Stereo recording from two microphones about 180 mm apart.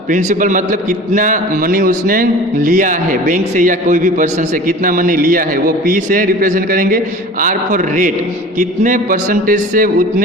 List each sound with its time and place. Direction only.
0.1 s a man's voice: 45° right (ahead or behind)